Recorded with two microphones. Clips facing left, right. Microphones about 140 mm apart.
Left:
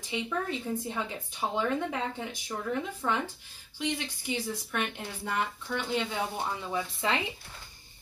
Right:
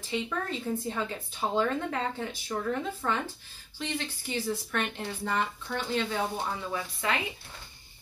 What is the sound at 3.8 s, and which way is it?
Speech, 10° left (ahead or behind).